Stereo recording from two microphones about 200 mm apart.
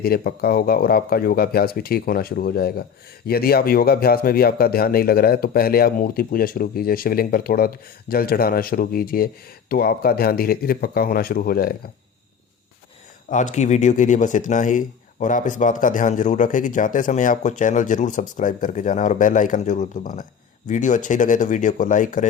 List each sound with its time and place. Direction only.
0.0 s speech: 50° left (ahead or behind)
13.3 s speech: 35° left (ahead or behind)